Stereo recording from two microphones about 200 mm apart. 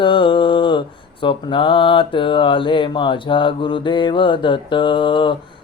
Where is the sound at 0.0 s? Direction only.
25° left (ahead or behind).